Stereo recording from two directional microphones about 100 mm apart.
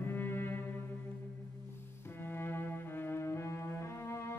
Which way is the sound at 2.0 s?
20° left (ahead or behind).